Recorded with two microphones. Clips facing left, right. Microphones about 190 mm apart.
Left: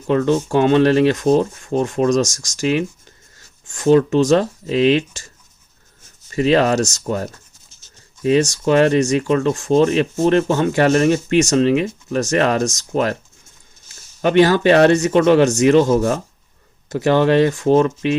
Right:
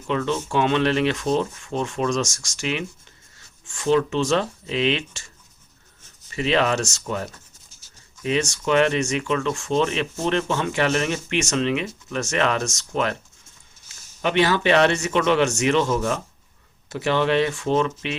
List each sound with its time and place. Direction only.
0.1 s speech: 45° left (ahead or behind)
6.3 s speech: 40° left (ahead or behind)